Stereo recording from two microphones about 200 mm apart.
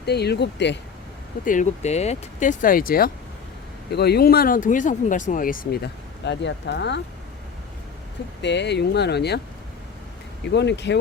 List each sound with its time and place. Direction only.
0.0 s speech: 55° left (ahead or behind)
1.5 s speech: 35° left (ahead or behind); by 7.0 s 60° left (ahead or behind)
8.4 s speech: 60° left (ahead or behind)
10.5 s speech: 60° left (ahead or behind)